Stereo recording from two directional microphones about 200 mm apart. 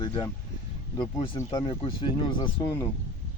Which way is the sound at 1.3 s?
20° left (ahead or behind).